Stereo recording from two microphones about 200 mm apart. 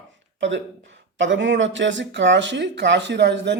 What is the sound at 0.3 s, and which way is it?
Speech, 65° right (ahead or behind).